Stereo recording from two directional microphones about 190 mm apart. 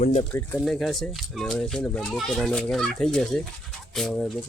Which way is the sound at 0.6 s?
Centre (ahead or behind).